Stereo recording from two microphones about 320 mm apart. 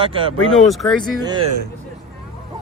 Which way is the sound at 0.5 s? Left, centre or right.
Centre.